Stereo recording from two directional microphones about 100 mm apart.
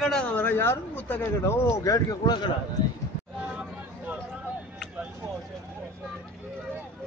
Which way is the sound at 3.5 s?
15° right (ahead or behind).